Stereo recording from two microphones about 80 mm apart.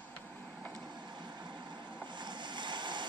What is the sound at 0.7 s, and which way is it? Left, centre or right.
Vehicle, right.